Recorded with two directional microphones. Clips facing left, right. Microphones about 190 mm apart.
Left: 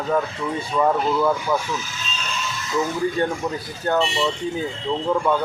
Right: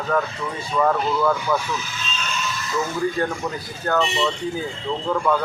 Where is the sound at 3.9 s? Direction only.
25° left (ahead or behind).